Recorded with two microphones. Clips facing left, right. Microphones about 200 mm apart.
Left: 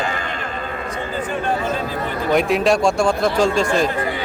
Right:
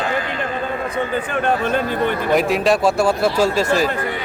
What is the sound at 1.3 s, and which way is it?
Speech, 60° right (ahead or behind).